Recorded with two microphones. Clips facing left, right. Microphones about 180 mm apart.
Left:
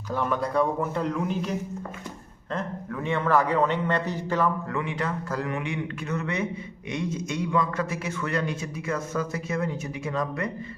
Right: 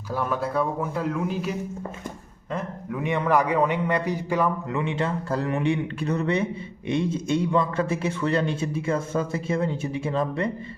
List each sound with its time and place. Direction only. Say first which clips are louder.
0.1 s a man's voice: even; 5° right (ahead or behind); by 10.5 s 30° right (ahead or behind)